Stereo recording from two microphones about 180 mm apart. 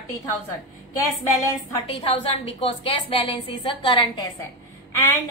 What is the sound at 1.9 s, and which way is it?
A woman's voice, 30° left (ahead or behind).